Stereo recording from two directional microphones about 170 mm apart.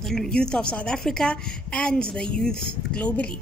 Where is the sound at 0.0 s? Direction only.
5° left (ahead or behind).